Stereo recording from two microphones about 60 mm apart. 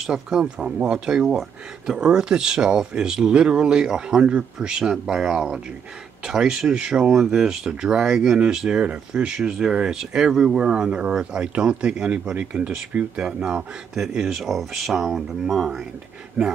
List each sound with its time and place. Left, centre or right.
0.0 s speech: centre
16.4 s speech: right